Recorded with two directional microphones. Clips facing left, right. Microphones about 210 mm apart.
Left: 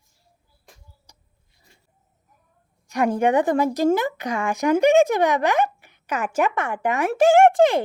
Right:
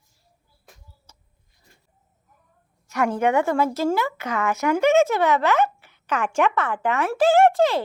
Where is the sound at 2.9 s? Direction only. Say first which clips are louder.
Left 2 dB; 15° left (ahead or behind).